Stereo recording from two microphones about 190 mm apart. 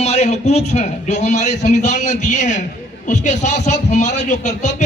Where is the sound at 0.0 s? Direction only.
35° left (ahead or behind).